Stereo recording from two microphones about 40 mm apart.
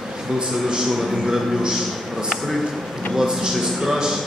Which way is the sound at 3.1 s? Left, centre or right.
Centre.